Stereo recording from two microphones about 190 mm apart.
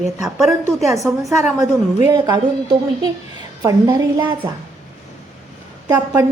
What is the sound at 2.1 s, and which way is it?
Speech, 20° right (ahead or behind).